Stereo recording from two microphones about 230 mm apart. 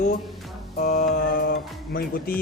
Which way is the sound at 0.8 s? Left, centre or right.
Left.